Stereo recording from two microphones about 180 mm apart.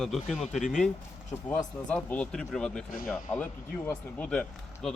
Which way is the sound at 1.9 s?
5° left (ahead or behind).